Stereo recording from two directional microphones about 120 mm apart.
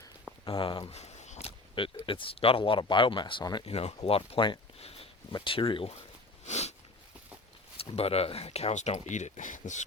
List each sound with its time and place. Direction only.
0.4 s speech: 45° left (ahead or behind)
0.9 s a sound: 65° left (ahead or behind); by 1.9 s 50° left (ahead or behind)
2.0 s speech: 45° left (ahead or behind)
3.7 s speech: 55° left (ahead or behind)
6.4 s a sound: 65° left (ahead or behind)
7.8 s speech: 55° left (ahead or behind); by 9.8 s 90° left